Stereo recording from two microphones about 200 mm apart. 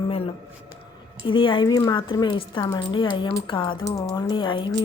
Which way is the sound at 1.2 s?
25° left (ahead or behind).